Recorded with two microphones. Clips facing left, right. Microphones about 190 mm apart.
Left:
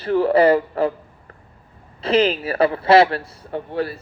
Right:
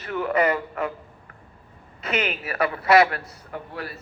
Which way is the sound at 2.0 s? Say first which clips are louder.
Left 9 dB; 30° left (ahead or behind).